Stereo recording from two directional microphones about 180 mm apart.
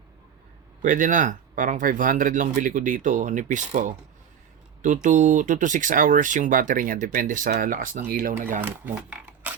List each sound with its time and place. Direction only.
0.8 s speech: 45° right (ahead or behind)
5.0 s speech: 45° right (ahead or behind)
8.6 s speech: 10° right (ahead or behind)